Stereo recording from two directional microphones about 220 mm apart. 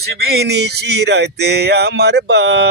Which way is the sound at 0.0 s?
45° right (ahead or behind).